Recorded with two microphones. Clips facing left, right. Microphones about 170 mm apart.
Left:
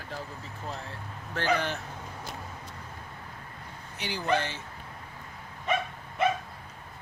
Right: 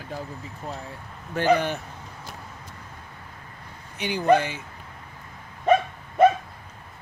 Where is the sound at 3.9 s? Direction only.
20° right (ahead or behind).